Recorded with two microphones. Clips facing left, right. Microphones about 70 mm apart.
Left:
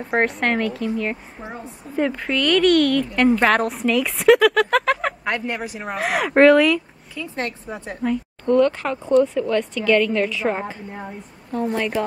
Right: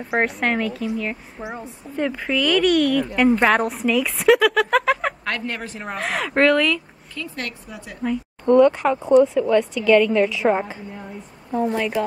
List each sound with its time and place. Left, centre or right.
0.0 s a woman's voice: centre
1.4 s speech: centre
2.0 s a woman's voice: centre
5.2 s speech: centre
7.3 s a woman's voice: left
8.5 s a woman's voice: centre